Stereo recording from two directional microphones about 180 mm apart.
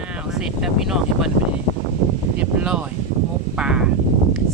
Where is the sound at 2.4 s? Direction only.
5° right (ahead or behind).